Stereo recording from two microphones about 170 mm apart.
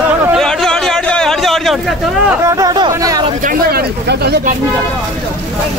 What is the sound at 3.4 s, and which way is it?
Speech, 65° right (ahead or behind).